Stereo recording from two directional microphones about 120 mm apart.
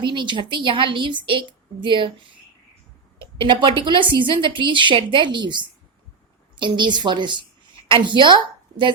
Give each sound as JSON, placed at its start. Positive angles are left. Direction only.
{"t": 0.0, "sound": "a woman's voice", "side_deg": -40}
{"t": 3.2, "sound": "a woman's voice", "side_deg": -45}